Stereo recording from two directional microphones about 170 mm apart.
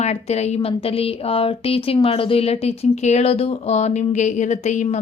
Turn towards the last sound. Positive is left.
turn(degrees=45)  # may be behind; listen again after turning